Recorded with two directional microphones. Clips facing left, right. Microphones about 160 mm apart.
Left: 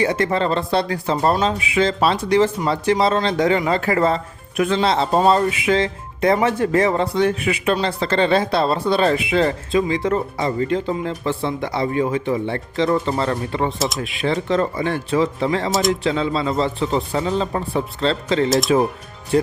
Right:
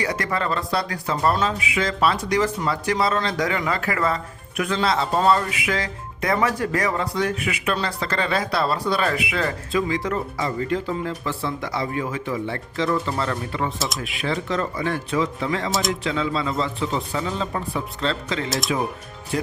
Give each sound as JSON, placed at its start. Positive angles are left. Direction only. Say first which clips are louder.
{"t": 0.0, "sound": "speech", "louder": "left 6 dB", "side_deg": 25}
{"t": 13.7, "sound": "speech", "louder": "left 5 dB", "side_deg": 0}
{"t": 14.0, "sound": "a man's voice", "louder": "left 5 dB", "side_deg": 25}